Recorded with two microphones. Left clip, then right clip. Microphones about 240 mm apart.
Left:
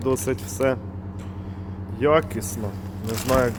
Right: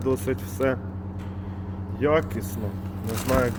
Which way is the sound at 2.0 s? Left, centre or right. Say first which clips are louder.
Left 3 dB; left.